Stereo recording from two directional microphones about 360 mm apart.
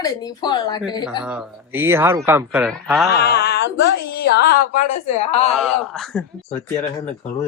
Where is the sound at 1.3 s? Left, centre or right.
Centre.